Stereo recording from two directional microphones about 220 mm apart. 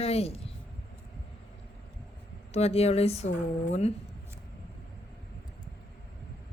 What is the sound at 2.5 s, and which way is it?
Speech, 30° left (ahead or behind).